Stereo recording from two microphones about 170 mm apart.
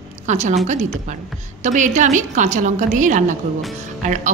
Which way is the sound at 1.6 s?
45° right (ahead or behind).